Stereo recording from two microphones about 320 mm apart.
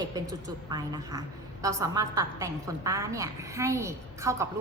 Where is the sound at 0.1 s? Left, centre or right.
Centre.